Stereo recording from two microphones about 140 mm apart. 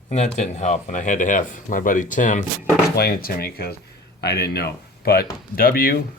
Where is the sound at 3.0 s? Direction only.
90° left.